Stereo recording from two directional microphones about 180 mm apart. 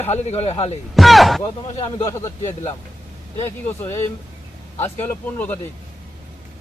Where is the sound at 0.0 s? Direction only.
35° left (ahead or behind).